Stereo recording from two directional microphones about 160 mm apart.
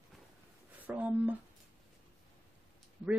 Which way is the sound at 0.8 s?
10° right (ahead or behind).